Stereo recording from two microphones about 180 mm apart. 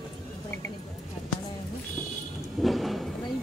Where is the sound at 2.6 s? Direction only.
Centre (ahead or behind).